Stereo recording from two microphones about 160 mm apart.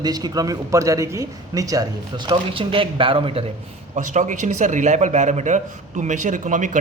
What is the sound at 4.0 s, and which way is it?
A man's voice, 50° right (ahead or behind).